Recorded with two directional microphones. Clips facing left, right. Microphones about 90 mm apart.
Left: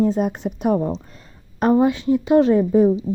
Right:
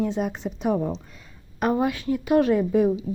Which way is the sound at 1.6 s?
30° left (ahead or behind).